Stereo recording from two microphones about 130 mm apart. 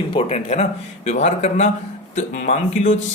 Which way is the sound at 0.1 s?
50° left (ahead or behind).